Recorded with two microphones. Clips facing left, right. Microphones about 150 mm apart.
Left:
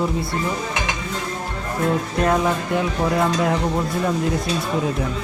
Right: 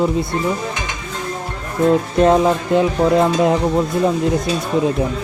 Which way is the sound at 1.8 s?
25° right (ahead or behind).